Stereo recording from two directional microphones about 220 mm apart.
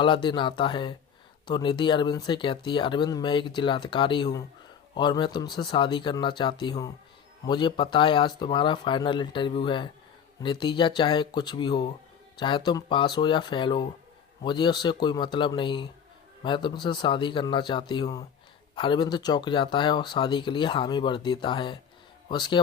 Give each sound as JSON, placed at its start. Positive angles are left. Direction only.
{"t": 0.0, "sound": "speech", "side_deg": 20}